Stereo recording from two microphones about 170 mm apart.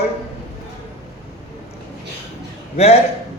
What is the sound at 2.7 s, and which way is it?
Speech, 35° left (ahead or behind).